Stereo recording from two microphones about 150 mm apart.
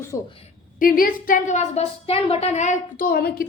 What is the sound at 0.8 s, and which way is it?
A woman's voice, 65° left (ahead or behind).